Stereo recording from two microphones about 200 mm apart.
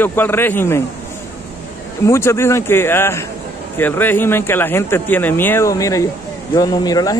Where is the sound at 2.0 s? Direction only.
15° left (ahead or behind).